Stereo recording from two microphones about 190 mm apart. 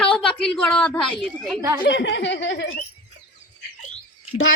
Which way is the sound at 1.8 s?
65° left (ahead or behind).